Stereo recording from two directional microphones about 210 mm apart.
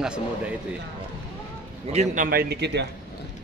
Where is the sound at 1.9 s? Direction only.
40° right (ahead or behind).